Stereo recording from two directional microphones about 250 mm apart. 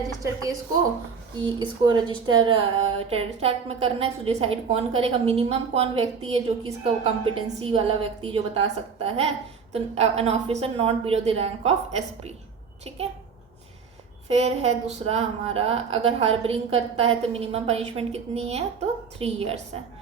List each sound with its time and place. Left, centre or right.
1.4 s speech: centre
14.3 s speech: right